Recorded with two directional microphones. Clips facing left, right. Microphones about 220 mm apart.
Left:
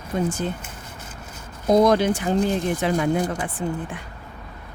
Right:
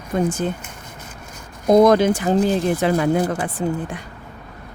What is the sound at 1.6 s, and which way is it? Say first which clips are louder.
Speech: right 4 dB; 50° right (ahead or behind).